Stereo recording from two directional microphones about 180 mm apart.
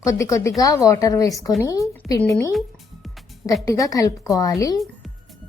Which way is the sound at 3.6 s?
20° left (ahead or behind).